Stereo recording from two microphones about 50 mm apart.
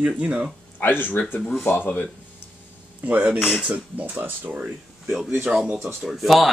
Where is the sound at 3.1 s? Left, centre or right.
Right.